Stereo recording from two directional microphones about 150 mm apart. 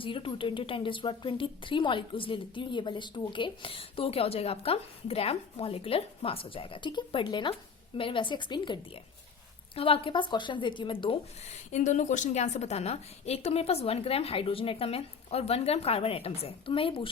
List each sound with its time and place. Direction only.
0.0 s a woman's voice: 35° left (ahead or behind)